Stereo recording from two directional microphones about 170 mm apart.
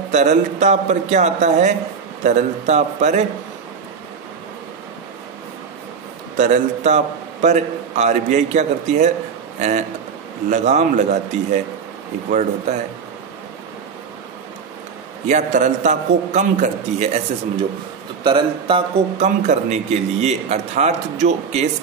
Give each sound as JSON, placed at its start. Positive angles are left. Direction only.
{"t": 0.1, "sound": "a man's voice", "side_deg": -45}
{"t": 6.3, "sound": "a man's voice", "side_deg": -45}
{"t": 12.3, "sound": "a man's voice", "side_deg": -45}
{"t": 15.2, "sound": "a man's voice", "side_deg": -45}